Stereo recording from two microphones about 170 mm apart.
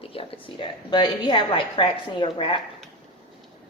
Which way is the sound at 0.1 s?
35° left (ahead or behind).